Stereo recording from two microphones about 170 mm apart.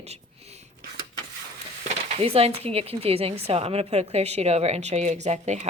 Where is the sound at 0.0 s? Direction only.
40° right (ahead or behind).